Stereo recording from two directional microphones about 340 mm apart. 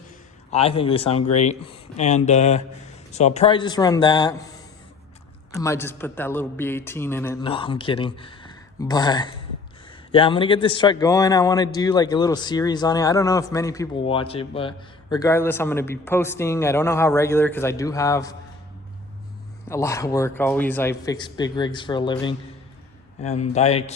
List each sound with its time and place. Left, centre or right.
0.5 s a man's voice: centre
19.6 s a man's voice: centre